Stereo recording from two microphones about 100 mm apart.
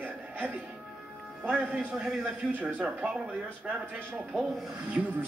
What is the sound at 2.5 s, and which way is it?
Speech, 15° right (ahead or behind).